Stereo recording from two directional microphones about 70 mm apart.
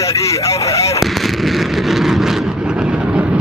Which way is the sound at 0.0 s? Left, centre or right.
Left.